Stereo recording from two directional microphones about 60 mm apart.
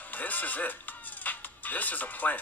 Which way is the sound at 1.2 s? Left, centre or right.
Left.